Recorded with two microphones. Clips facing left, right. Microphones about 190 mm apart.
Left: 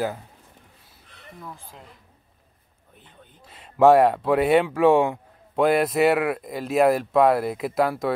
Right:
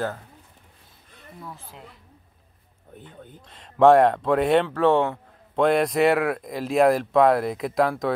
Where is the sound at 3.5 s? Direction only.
5° left (ahead or behind).